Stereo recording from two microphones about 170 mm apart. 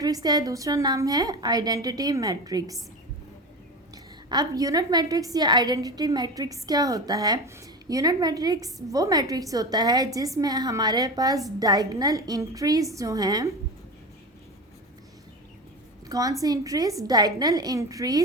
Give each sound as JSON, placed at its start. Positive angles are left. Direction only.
{"t": 0.0, "sound": "a woman's voice", "side_deg": -20}
{"t": 3.9, "sound": "a woman's voice", "side_deg": -20}
{"t": 16.0, "sound": "a woman's voice", "side_deg": -20}